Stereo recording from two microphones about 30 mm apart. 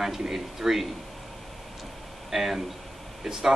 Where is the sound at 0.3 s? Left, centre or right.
Centre.